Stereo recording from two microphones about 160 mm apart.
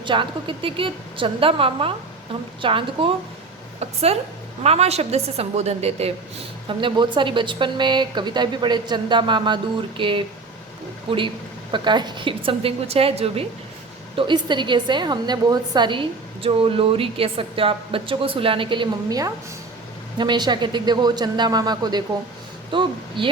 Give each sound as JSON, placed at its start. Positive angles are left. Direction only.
{"t": 0.0, "sound": "a woman's voice", "side_deg": -30}